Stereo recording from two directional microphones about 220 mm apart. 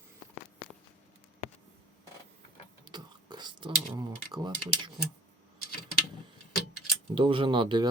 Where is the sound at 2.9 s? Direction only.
20° right (ahead or behind).